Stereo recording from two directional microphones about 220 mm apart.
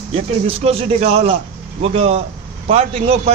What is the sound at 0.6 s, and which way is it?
A man's voice, 30° right (ahead or behind).